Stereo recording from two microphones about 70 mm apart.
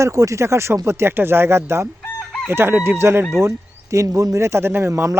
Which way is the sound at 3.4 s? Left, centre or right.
Right.